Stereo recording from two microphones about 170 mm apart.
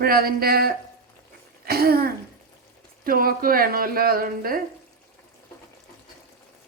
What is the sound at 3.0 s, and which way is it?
Speech, 60° right (ahead or behind).